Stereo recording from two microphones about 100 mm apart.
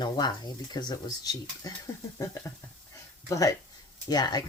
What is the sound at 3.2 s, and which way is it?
Speech, 35° left (ahead or behind).